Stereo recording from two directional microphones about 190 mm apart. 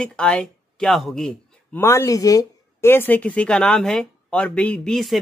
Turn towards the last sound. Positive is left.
turn(degrees=0)  # may be behind; listen again after turning